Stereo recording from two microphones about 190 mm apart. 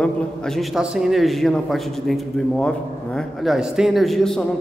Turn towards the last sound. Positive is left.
turn(degrees=0)  # may be behind; listen again after turning